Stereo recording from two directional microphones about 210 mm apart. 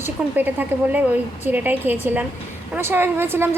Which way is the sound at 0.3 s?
10° right (ahead or behind).